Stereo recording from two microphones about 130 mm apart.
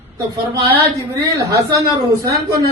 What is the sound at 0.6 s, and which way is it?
Speech, 25° right (ahead or behind).